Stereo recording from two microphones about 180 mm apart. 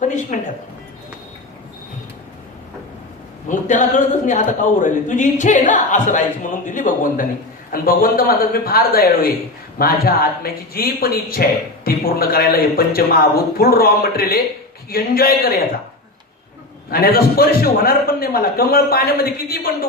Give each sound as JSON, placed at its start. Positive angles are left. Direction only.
{"t": 0.3, "sound": "a man's voice", "side_deg": 45}
{"t": 3.5, "sound": "a man's voice", "side_deg": 45}
{"t": 16.9, "sound": "a man's voice", "side_deg": 55}